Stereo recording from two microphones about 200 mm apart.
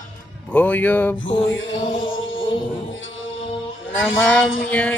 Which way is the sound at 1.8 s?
25° left (ahead or behind).